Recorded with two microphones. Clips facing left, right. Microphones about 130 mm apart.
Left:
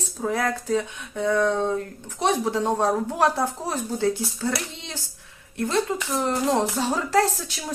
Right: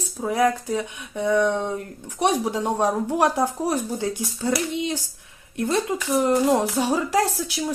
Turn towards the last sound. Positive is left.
turn(degrees=-15)  # may be behind; listen again after turning